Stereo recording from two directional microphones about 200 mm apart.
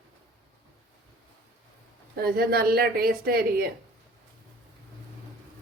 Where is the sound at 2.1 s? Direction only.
50° right (ahead or behind).